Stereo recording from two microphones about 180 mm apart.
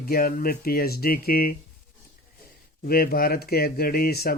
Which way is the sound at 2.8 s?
55° left (ahead or behind).